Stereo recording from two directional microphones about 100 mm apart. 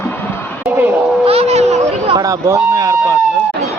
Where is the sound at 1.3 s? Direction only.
90° right.